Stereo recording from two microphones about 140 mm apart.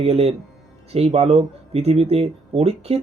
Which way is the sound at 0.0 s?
50° right (ahead or behind).